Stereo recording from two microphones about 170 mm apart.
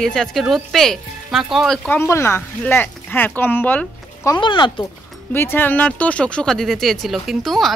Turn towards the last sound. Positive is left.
turn(degrees=0)  # may be behind; listen again after turning